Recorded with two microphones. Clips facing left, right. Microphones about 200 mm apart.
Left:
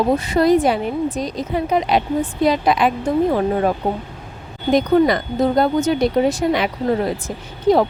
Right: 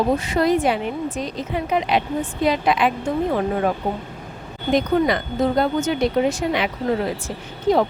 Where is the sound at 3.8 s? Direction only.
50° left (ahead or behind).